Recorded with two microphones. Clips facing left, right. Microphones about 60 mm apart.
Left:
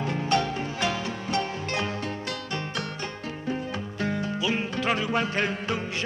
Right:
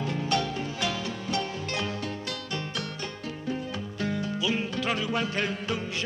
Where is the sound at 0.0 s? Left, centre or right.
Left.